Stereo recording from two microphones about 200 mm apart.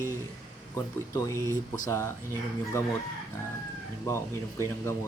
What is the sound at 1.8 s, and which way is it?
Speech, 15° left (ahead or behind).